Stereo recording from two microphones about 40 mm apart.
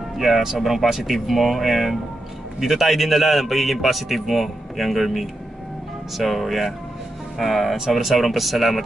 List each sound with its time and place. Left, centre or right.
0.2 s a man's voice: centre